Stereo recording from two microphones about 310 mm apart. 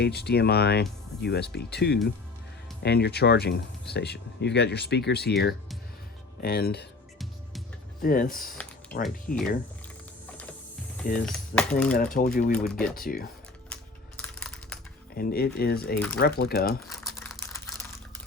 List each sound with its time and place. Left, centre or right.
0.0 s speech: left
8.0 s speech: left
9.3 s speech: centre
11.0 s speech: left
11.3 s speech: centre
11.9 s speech: left
12.5 s speech: centre
12.9 s speech: left
14.2 s typing: centre
15.1 s speech: left
17.0 s typing: centre